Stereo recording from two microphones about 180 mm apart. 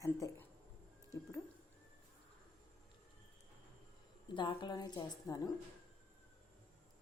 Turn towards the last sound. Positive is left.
turn(degrees=20)  # may be behind; listen again after turning